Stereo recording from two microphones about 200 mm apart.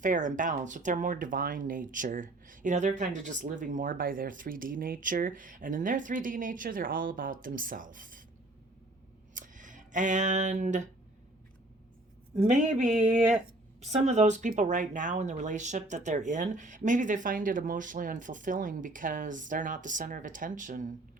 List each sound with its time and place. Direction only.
0.0 s speech: 40° right (ahead or behind)
9.3 s a sound: 40° right (ahead or behind)
12.4 s speech: 40° right (ahead or behind)
13.0 s speech: 10° right (ahead or behind)
13.9 s speech: 35° right (ahead or behind)